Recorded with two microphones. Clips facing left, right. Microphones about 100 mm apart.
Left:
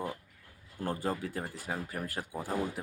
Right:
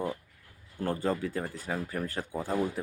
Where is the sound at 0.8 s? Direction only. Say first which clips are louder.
Right 4 dB; 10° left (ahead or behind).